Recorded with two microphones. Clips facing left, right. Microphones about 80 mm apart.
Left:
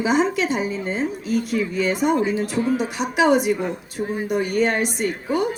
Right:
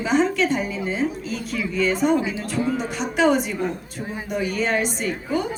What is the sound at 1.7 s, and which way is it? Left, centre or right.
A woman's voice, centre.